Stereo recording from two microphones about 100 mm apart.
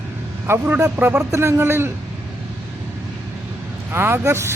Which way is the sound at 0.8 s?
15° right (ahead or behind).